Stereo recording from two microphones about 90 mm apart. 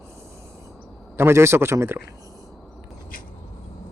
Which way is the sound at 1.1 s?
30° right (ahead or behind).